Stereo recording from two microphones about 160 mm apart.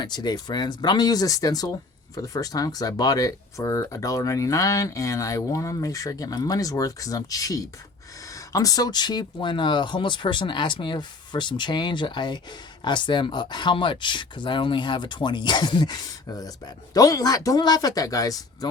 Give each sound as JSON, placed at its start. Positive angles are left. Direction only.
{"t": 0.0, "sound": "speech", "side_deg": 25}